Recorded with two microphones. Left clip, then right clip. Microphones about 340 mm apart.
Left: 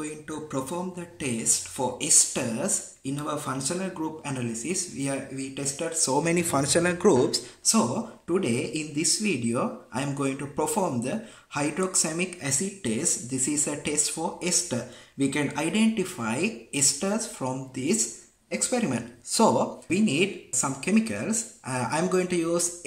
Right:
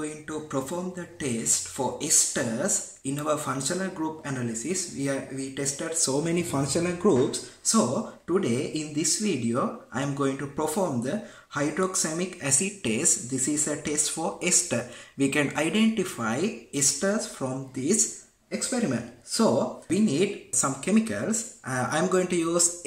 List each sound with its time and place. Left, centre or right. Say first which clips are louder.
0.0 s speech: right 1 dB; centre
6.2 s speech: left 2 dB; centre
6.5 s speech: left 4 dB; left
7.2 s speech: left 3 dB; centre